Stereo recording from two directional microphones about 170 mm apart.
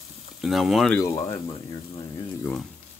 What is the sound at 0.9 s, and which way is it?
Speech, 15° left (ahead or behind).